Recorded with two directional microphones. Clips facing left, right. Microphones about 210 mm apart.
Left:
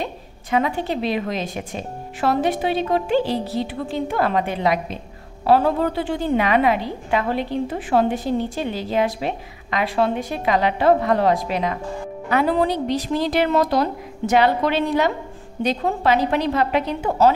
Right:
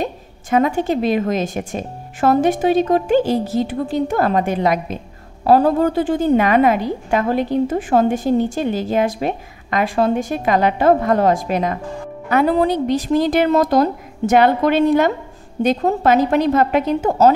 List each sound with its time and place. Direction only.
0.0 s a woman's voice: 45° right (ahead or behind)